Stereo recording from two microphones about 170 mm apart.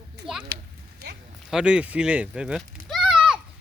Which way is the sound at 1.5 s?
5° right (ahead or behind).